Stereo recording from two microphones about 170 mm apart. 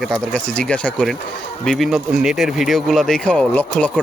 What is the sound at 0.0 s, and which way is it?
Speech, 5° left (ahead or behind).